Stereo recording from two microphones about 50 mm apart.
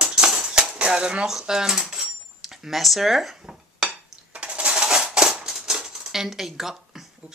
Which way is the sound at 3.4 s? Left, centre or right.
Centre.